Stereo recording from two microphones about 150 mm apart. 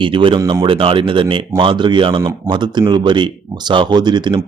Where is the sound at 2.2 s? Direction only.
20° right (ahead or behind).